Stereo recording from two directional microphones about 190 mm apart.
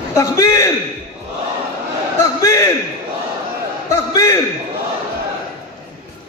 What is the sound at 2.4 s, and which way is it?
Speech, 15° left (ahead or behind).